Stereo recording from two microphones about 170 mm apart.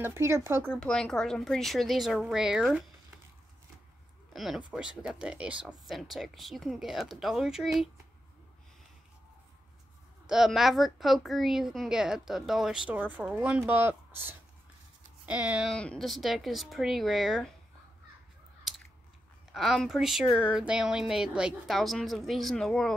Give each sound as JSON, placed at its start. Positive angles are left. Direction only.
{"t": 0.0, "sound": "speech", "side_deg": -15}
{"t": 0.7, "sound": "a woman's voice", "side_deg": 5}
{"t": 4.3, "sound": "a woman's voice", "side_deg": 0}
{"t": 10.2, "sound": "a woman's voice", "side_deg": -5}
{"t": 18.7, "sound": "scissors", "side_deg": 0}
{"t": 19.5, "sound": "a woman's voice", "side_deg": 0}